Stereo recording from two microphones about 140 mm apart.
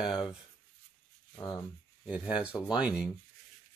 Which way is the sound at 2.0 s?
10° right (ahead or behind).